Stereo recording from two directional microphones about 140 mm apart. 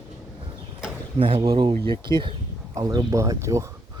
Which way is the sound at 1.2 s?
40° right (ahead or behind).